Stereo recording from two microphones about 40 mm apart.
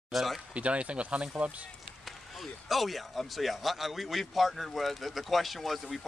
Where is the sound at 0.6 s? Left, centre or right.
Right.